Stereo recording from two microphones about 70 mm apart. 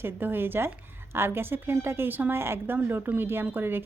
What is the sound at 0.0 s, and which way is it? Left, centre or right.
A woman's voice, right.